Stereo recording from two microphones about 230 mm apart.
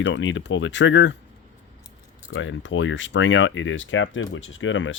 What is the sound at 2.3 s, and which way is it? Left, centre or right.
Speech, left.